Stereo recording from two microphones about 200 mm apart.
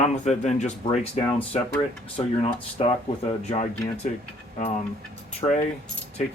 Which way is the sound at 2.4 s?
25° left (ahead or behind).